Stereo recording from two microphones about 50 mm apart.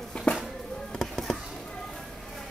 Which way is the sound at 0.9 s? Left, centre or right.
Centre.